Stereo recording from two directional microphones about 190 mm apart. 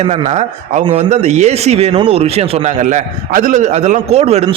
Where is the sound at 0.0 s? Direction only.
35° right (ahead or behind).